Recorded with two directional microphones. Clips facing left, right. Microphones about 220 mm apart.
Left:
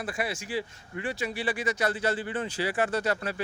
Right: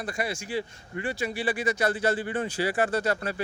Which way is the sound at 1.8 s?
50° right (ahead or behind).